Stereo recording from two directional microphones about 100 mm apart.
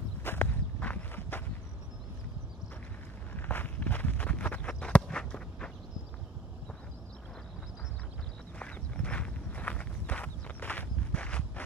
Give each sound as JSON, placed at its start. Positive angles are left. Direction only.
{"t": 0.2, "sound": "walk", "side_deg": 20}
{"t": 3.3, "sound": "walk", "side_deg": 20}
{"t": 8.5, "sound": "walk", "side_deg": 10}